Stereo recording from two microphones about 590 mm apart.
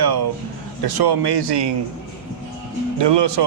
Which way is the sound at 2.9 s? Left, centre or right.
Right.